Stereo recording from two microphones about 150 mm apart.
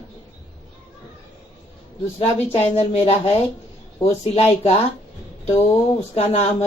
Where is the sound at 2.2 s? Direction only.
40° left (ahead or behind).